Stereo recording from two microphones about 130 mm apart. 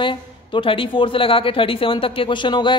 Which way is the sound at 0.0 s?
40° left (ahead or behind).